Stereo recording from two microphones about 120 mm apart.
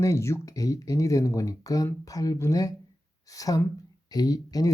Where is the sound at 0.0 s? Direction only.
25° left (ahead or behind).